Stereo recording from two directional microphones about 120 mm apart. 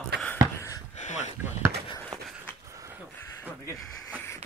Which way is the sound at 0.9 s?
75° left (ahead or behind).